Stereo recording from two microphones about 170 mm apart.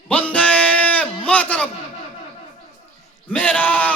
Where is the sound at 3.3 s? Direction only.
10° left (ahead or behind).